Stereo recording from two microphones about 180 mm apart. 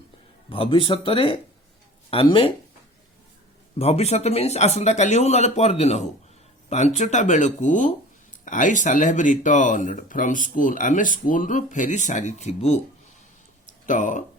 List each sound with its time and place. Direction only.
0.5 s speech: 30° left (ahead or behind)
3.8 s speech: 35° left (ahead or behind)
13.8 s speech: 45° left (ahead or behind)